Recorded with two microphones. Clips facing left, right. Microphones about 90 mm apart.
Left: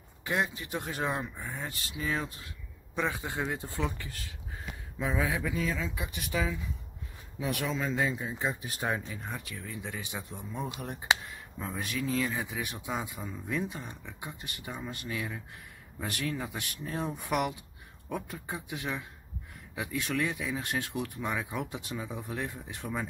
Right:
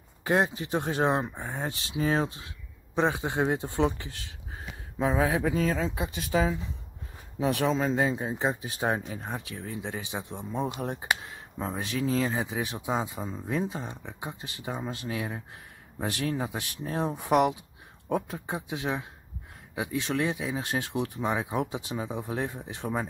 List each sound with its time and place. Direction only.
0.2 s speech: 35° right (ahead or behind)
1.4 s speech: 45° right (ahead or behind); by 3.8 s 25° right (ahead or behind)
4.9 s speech: 35° right (ahead or behind)
9.7 s speech: 25° right (ahead or behind)